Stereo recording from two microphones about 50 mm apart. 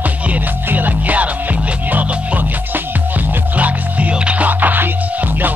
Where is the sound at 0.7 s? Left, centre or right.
Right.